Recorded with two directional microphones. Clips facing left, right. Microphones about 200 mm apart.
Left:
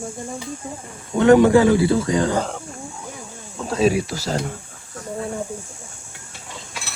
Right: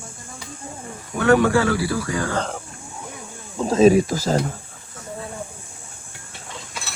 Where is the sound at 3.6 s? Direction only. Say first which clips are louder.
Right 5 dB; 40° right (ahead or behind).